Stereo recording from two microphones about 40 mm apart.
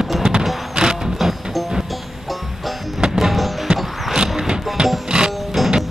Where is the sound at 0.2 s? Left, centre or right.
Centre.